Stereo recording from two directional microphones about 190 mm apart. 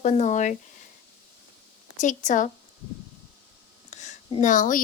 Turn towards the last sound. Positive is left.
turn(degrees=45)  # may be behind; listen again after turning